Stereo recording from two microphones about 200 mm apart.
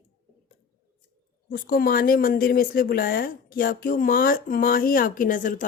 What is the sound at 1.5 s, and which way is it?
A woman's voice, 45° left (ahead or behind).